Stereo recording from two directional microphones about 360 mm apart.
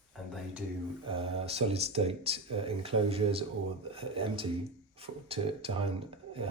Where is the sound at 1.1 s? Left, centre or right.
Centre.